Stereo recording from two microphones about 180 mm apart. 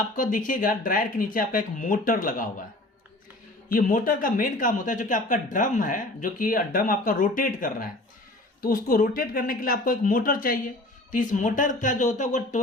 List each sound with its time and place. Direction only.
0.2 s speech: 45° left (ahead or behind)
3.7 s speech: 50° left (ahead or behind)